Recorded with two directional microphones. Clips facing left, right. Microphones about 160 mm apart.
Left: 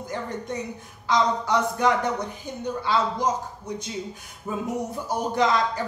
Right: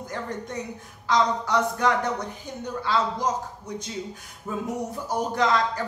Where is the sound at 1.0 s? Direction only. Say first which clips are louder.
Even; 15° left (ahead or behind).